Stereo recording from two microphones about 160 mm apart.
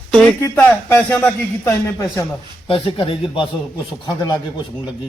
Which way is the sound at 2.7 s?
35° left (ahead or behind).